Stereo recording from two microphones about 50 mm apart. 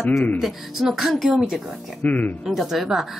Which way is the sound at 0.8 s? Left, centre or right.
Centre.